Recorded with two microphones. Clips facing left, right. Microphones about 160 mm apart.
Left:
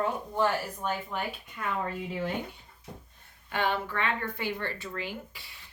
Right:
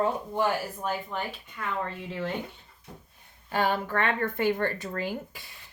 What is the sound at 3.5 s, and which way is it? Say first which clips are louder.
Speech: right 3 dB; 40° right (ahead or behind).